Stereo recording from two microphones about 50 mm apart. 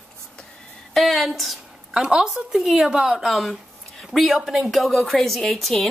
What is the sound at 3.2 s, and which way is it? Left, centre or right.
A woman's voice, centre.